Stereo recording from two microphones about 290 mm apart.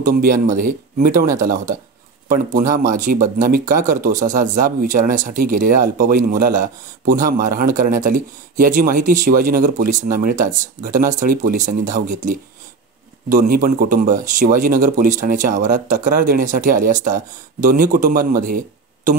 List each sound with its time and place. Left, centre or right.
0.0 s speech: right